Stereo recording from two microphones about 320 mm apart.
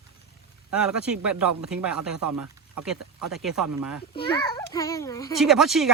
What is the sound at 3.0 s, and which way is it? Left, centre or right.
Speech, right.